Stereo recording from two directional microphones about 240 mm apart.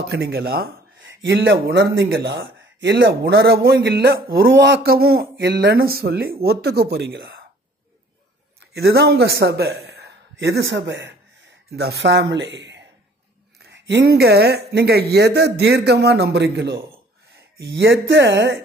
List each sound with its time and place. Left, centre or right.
0.1 s speech: right
8.5 s a man's voice: right